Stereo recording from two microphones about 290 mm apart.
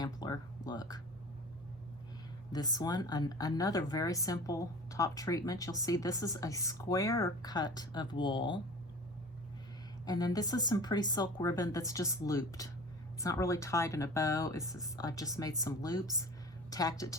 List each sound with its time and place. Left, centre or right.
0.0 s a sound: centre
2.5 s speech: centre
10.1 s speech: centre